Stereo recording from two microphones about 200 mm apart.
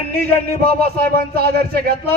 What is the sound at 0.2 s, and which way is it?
Speech, 50° right (ahead or behind).